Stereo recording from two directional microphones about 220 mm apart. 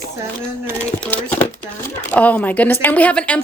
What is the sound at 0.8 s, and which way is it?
A woman's voice, 5° left (ahead or behind).